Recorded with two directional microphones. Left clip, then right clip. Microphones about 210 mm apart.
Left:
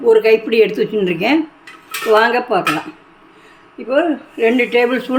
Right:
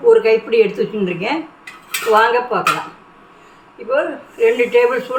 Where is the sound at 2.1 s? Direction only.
55° left (ahead or behind).